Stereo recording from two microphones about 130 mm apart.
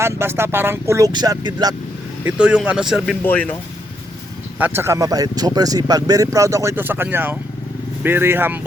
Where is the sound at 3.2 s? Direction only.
10° left (ahead or behind).